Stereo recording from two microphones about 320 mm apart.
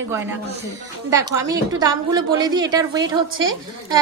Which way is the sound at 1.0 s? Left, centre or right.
Centre.